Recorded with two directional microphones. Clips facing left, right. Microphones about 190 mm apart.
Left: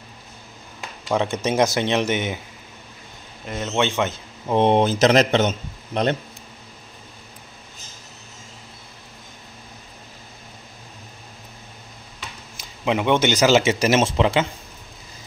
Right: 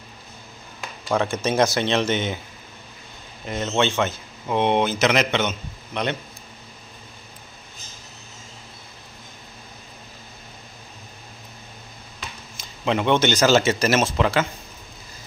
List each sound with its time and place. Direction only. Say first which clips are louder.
1.0 s speech: left 1 dB; 20° left (ahead or behind)
3.4 s speech: right 1 dB; 5° left (ahead or behind)
4.5 s a man's voice: left 3 dB; 35° left (ahead or behind)
12.5 s speech: left 1 dB; 10° left (ahead or behind)